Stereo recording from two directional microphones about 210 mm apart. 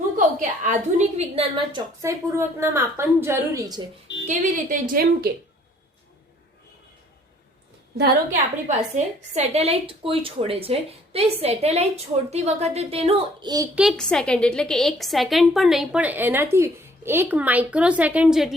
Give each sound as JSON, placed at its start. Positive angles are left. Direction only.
{"t": 0.2, "sound": "a woman's voice", "side_deg": -35}
{"t": 2.0, "sound": "a woman's voice", "side_deg": -15}
{"t": 4.3, "sound": "a woman's voice", "side_deg": -40}
{"t": 8.4, "sound": "a woman's voice", "side_deg": -35}
{"t": 13.7, "sound": "a woman's voice", "side_deg": 0}